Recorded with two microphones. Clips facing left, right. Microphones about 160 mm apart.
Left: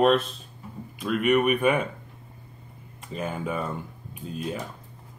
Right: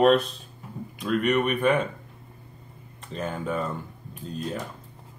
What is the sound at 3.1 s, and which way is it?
Speech, 5° left (ahead or behind).